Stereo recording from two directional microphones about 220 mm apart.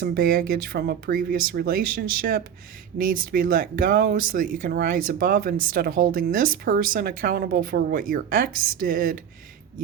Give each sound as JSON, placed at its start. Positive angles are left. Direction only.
{"t": 0.0, "sound": "speech", "side_deg": -45}